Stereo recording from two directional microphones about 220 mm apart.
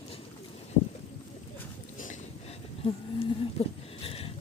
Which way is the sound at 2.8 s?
25° left (ahead or behind).